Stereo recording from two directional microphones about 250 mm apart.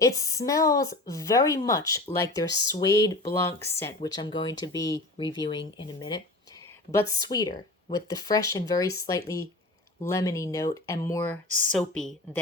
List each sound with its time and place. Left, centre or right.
0.0 s a woman's voice: centre